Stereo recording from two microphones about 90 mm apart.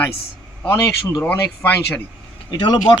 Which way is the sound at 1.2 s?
20° left (ahead or behind).